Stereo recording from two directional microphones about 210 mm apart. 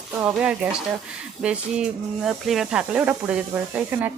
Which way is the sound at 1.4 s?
Centre (ahead or behind).